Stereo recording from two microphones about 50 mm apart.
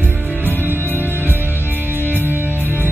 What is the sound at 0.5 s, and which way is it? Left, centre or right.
Music, right.